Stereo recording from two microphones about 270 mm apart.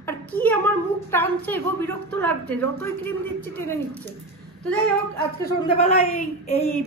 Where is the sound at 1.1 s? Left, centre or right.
Centre.